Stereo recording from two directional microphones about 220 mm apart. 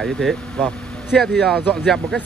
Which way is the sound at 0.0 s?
Centre (ahead or behind).